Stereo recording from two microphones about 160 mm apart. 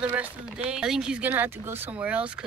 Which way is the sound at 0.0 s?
10° right (ahead or behind).